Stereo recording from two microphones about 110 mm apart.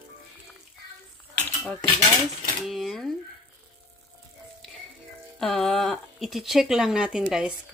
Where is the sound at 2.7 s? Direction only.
Centre (ahead or behind).